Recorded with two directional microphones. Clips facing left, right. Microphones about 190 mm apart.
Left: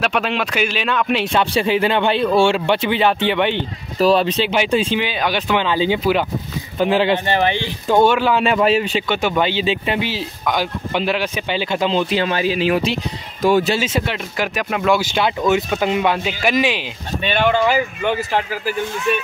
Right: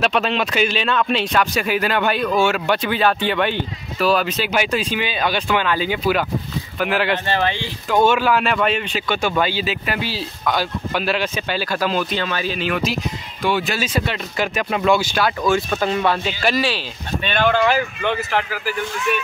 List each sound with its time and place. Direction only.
0.0 s speech: 10° left (ahead or behind)
1.2 s speech: 30° left (ahead or behind)
4.0 s speech: 30° left (ahead or behind)
4.9 s speech: 15° left (ahead or behind)
8.5 s speech: 35° left (ahead or behind)
9.1 s speech: 20° left (ahead or behind)
13.4 s speech: 45° left (ahead or behind)
13.7 s speech: 25° left (ahead or behind)
14.0 s speech: 10° left (ahead or behind)
14.9 s speech: 20° left (ahead or behind)